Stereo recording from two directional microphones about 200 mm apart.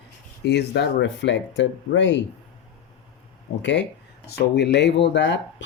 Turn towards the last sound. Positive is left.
turn(degrees=65)  # may be behind; listen again after turning